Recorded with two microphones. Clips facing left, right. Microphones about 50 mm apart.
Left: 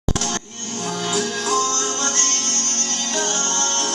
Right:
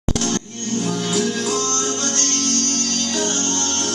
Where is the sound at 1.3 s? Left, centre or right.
Left.